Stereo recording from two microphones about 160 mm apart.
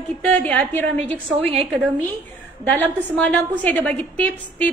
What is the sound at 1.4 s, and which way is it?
Speech, 35° right (ahead or behind).